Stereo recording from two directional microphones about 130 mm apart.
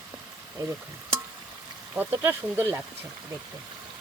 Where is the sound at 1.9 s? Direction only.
15° right (ahead or behind).